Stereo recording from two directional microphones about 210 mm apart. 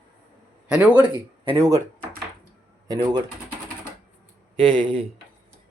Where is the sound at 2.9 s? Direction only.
20° right (ahead or behind).